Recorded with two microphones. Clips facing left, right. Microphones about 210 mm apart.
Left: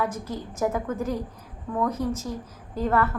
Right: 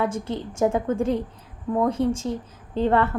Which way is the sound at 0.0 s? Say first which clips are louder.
Right 4 dB; 30° right (ahead or behind).